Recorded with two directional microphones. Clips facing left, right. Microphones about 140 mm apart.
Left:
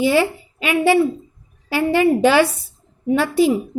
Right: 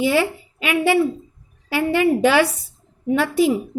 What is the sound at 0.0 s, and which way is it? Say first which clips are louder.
A woman's voice: left 2 dB; 30° left (ahead or behind).